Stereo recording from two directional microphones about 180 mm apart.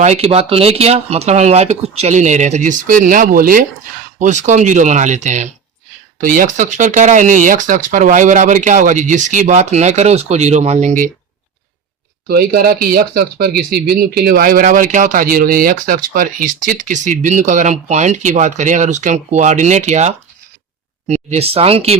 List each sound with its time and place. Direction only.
0.0 s speech: 35° right (ahead or behind)
12.3 s speech: 55° right (ahead or behind); by 21.9 s 35° right (ahead or behind)